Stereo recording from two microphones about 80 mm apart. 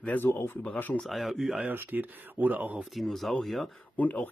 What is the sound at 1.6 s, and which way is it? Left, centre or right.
Speech, right.